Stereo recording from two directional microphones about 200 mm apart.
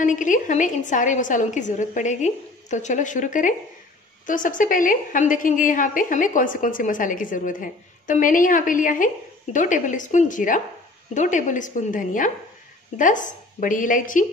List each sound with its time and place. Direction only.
0.0 s a woman's voice: 40° left (ahead or behind)